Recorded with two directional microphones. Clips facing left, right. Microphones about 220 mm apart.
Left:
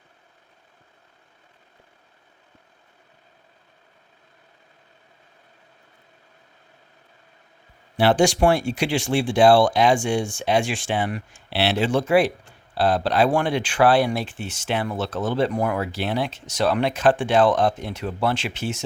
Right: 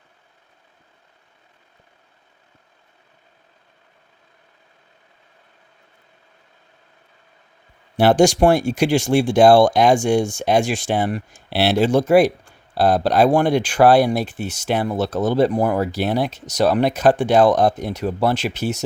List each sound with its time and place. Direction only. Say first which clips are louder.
7.9 s speech: right 4 dB; 45° right (ahead or behind)